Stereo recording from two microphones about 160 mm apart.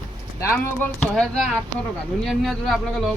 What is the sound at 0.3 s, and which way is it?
Speech, 15° left (ahead or behind).